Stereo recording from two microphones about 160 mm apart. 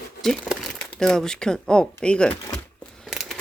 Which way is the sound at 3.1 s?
Centre (ahead or behind).